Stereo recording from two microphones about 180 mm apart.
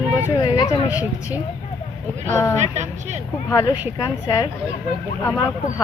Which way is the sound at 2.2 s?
15° left (ahead or behind).